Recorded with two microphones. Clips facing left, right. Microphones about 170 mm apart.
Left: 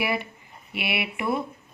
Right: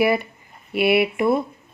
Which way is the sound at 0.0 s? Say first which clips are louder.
Right 8 dB; 40° right (ahead or behind).